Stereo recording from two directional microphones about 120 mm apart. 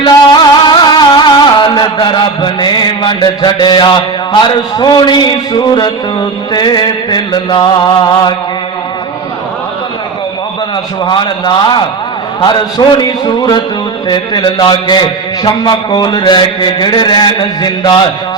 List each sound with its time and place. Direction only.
0.0 s music: 40° left (ahead or behind)
11.0 s a man's voice: 40° left (ahead or behind)